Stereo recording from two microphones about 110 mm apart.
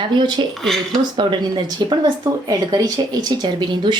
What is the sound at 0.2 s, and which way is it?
Speech, 45° right (ahead or behind).